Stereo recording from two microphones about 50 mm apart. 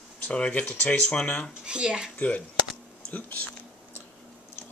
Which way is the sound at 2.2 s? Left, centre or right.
Left.